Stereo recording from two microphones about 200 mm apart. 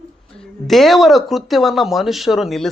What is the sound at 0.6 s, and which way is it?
Speech, centre (ahead or behind).